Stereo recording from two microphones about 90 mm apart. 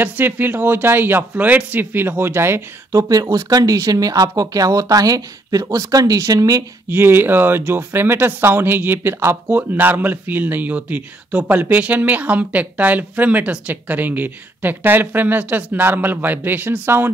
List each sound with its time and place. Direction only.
0.0 s speech: 20° right (ahead or behind)
3.0 s speech: 45° right (ahead or behind)
6.9 s speech: 25° right (ahead or behind)